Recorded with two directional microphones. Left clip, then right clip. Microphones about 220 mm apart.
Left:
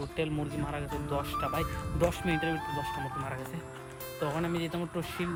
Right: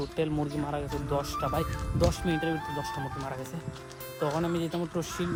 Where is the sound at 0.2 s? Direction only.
20° right (ahead or behind).